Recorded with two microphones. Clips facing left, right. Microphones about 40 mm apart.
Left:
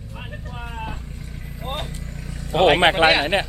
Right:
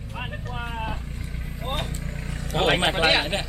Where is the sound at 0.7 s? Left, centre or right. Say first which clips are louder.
Even; centre.